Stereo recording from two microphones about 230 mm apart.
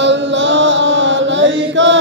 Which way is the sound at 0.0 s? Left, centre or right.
Right.